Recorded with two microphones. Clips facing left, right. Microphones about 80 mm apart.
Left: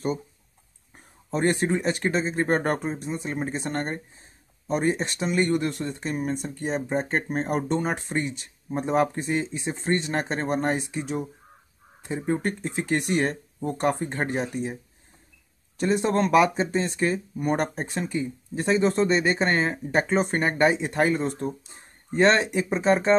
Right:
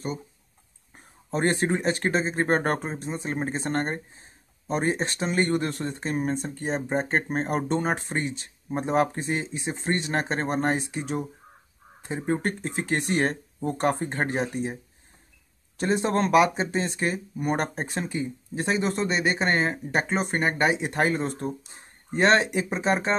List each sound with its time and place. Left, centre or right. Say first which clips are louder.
1.3 s speech: left 1 dB; right
15.8 s speech: left 1 dB; right
18.9 s speech: left 3 dB; centre
20.8 s speech: left 2 dB; right
22.7 s speech: left 3 dB; centre